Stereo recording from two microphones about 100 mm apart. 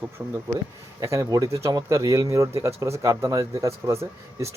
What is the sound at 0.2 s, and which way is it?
Speech, 20° right (ahead or behind).